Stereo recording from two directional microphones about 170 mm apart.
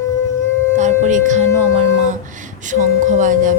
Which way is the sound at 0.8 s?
45° right (ahead or behind).